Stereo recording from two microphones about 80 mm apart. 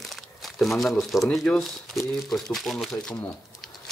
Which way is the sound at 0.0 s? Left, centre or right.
Centre.